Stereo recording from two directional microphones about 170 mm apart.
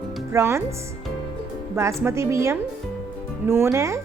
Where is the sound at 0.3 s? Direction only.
15° right (ahead or behind).